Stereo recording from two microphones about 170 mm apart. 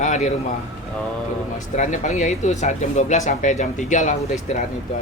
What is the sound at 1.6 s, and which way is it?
Speech, 45° left (ahead or behind).